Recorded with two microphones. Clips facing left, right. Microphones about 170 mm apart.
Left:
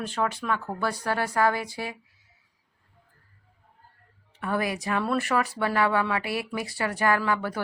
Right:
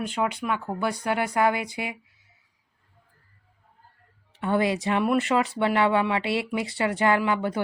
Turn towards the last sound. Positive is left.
turn(degrees=-20)  # may be behind; listen again after turning